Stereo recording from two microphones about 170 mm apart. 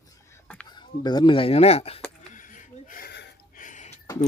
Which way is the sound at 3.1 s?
80° left.